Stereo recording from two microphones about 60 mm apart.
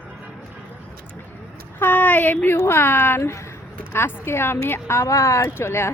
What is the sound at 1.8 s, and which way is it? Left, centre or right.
Speech, left.